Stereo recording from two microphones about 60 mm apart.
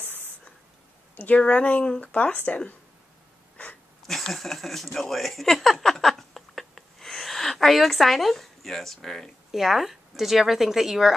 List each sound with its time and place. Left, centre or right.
1.1 s speech: left
4.0 s speech: centre
4.9 s a sound: centre
9.5 s speech: centre